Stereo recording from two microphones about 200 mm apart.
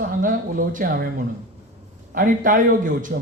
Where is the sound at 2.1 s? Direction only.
40° right (ahead or behind).